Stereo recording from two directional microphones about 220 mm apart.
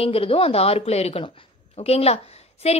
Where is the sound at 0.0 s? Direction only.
25° left (ahead or behind).